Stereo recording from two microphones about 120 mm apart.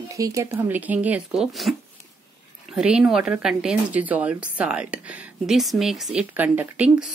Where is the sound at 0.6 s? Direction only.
15° right (ahead or behind).